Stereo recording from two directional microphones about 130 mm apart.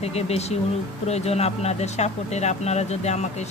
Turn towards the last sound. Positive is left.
turn(degrees=60)  # may be behind; listen again after turning